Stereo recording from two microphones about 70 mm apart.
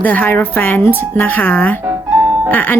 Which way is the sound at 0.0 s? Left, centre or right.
Left.